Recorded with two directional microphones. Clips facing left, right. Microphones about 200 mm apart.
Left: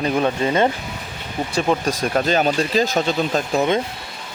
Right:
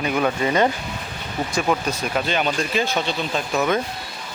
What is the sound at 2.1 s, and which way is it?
Speech, 40° left (ahead or behind).